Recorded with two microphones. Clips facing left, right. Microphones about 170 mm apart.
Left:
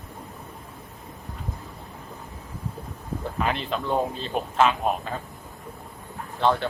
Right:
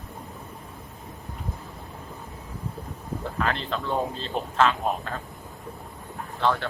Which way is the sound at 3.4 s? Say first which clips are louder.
Left 1 dB; 15° left (ahead or behind).